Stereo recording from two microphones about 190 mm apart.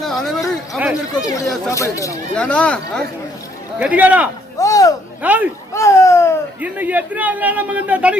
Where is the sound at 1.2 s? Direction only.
15° left (ahead or behind).